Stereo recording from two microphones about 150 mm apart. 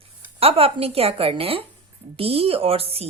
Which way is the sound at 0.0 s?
40° right (ahead or behind).